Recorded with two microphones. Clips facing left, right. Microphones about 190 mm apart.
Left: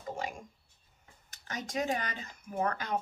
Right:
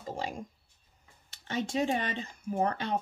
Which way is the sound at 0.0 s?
30° right (ahead or behind).